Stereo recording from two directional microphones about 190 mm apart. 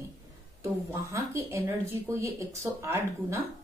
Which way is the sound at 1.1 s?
15° right (ahead or behind).